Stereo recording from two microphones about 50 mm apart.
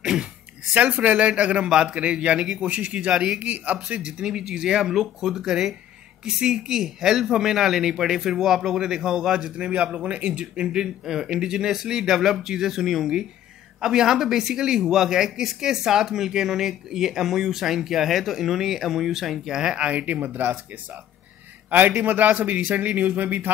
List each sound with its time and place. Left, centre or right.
0.0 s a sound: centre
0.7 s a man's voice: right
2.6 s a man's voice: right
3.3 s speech: right; by 9.5 s centre
9.6 s a man's voice: right
21.6 s a man's voice: right